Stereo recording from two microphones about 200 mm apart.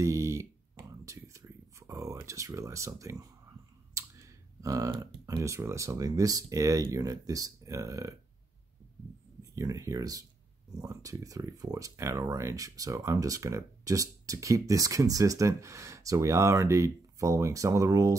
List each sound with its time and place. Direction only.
0.0 s a sound: 15° right (ahead or behind)
3.9 s speech: 15° right (ahead or behind)
9.4 s speech: 15° right (ahead or behind)